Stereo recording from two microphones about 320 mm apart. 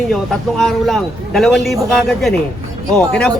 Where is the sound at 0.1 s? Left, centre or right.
Centre.